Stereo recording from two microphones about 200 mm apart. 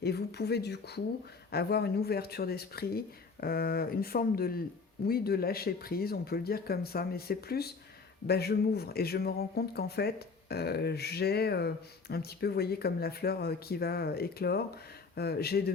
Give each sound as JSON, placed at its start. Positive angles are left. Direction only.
{"t": 0.0, "sound": "speech", "side_deg": 55}